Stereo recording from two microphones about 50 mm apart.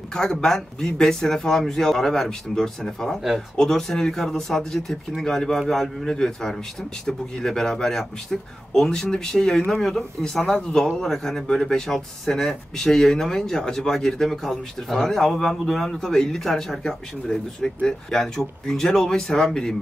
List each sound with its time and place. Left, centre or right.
0.1 s speech: centre